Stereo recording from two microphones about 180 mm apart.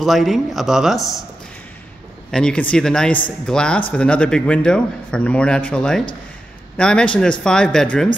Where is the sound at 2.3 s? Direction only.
5° left (ahead or behind).